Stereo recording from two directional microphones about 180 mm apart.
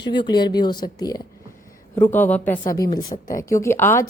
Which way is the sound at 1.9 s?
10° left (ahead or behind).